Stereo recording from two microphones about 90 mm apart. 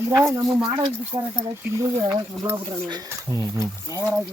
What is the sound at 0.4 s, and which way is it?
Speech, centre (ahead or behind).